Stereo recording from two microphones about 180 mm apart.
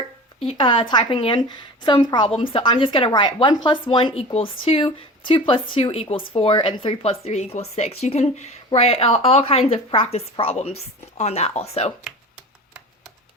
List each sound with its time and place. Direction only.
0.3 s a woman's voice: 30° left (ahead or behind)